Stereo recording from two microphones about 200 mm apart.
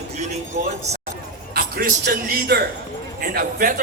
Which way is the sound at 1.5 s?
45° right (ahead or behind).